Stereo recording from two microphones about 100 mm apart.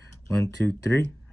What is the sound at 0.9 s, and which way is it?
Speech, 15° left (ahead or behind).